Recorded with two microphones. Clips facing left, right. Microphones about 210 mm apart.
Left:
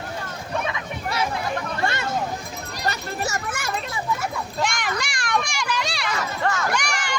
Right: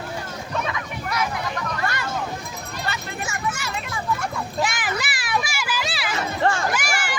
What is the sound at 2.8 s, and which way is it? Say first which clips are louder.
Vehicle: left 5 dB; 40° left (ahead or behind).